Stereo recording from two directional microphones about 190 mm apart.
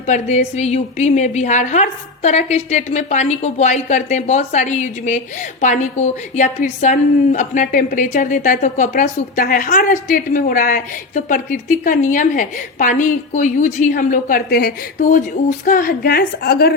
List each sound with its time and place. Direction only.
0.1 s a woman's voice: 35° left (ahead or behind); by 16.7 s 55° left (ahead or behind)